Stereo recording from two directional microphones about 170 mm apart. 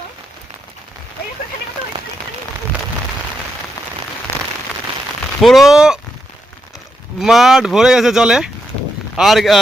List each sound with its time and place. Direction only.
4.3 s rain on surface: 30° left (ahead or behind)
5.4 s speech: centre (ahead or behind)
7.2 s speech: centre (ahead or behind)